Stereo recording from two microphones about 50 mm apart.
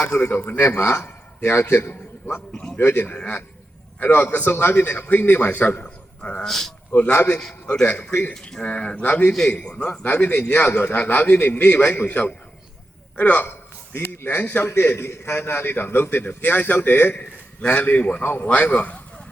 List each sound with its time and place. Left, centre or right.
0.0 s a man's voice: left
6.4 s a man's voice: centre
6.9 s a man's voice: left
8.3 s a man's voice: centre
9.0 s a man's voice: left
13.5 s a sound: left
14.8 s a man's voice: left
17.6 s a man's voice: left